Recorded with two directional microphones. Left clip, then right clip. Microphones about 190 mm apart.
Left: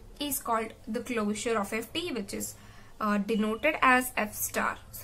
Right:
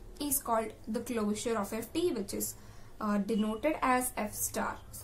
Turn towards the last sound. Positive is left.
turn(degrees=20)  # may be behind; listen again after turning